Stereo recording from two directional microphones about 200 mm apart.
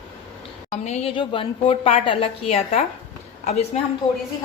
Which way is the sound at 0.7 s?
35° left (ahead or behind).